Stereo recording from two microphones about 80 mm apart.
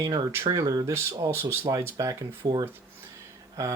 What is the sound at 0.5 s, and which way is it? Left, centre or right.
Speech, right.